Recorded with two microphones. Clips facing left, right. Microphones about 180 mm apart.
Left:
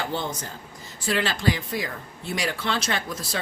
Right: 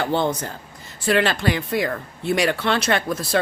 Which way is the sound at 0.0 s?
60° right (ahead or behind).